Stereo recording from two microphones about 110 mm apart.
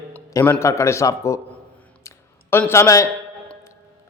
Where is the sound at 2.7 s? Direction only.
25° left (ahead or behind).